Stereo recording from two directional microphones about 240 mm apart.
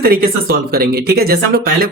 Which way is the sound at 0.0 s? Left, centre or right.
Right.